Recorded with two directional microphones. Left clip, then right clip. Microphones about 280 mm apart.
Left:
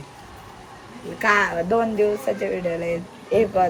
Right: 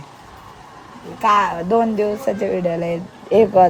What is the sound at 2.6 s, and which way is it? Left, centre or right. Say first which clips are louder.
Speech: right 4 dB; right.